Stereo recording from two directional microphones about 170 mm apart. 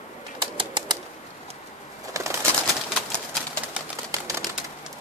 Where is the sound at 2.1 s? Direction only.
15° right (ahead or behind).